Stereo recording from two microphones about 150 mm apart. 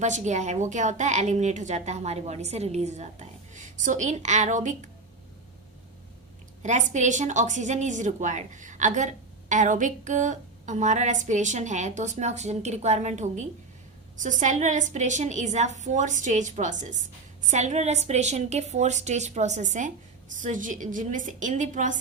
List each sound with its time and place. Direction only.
0.0 s a woman's voice: 50° right (ahead or behind)
6.6 s a woman's voice: 55° right (ahead or behind)